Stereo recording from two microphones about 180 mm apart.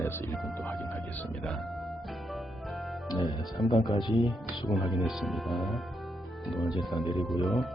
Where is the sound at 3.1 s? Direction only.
20° left (ahead or behind).